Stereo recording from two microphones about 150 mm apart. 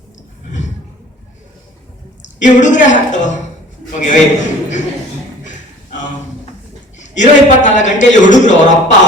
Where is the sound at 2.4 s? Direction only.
55° left (ahead or behind).